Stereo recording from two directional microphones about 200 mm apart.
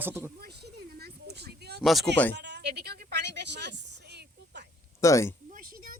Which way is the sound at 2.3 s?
60° right (ahead or behind).